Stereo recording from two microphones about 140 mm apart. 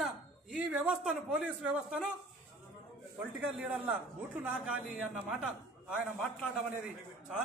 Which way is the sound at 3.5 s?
5° right (ahead or behind).